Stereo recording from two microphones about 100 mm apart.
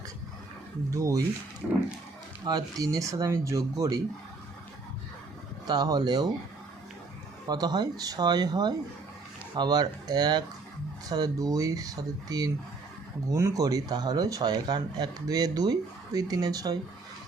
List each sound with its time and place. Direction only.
0.9 s speech: 35° right (ahead or behind)
1.6 s a sound: 5° right (ahead or behind)
2.4 s speech: 40° right (ahead or behind)
5.6 s speech: 45° right (ahead or behind)
7.4 s speech: 40° right (ahead or behind)